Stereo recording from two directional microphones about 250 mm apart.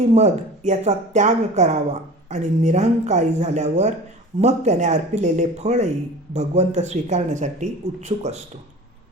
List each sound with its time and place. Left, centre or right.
0.1 s speech: right